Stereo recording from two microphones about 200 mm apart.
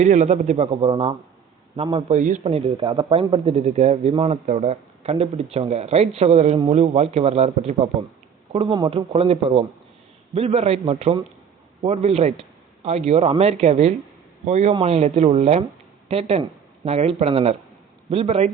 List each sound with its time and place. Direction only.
0.0 s speech: 35° right (ahead or behind)
2.1 s a man's voice: 40° right (ahead or behind)